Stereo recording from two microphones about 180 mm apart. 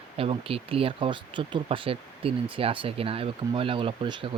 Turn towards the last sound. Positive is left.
turn(degrees=-25)  # may be behind; listen again after turning